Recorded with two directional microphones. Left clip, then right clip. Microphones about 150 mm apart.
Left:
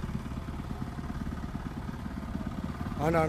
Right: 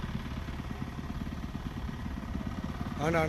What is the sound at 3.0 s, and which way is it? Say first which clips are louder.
Speech: left 2 dB; 15° left (ahead or behind).